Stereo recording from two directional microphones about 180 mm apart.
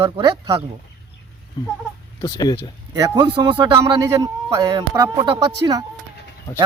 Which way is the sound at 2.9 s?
25° right (ahead or behind).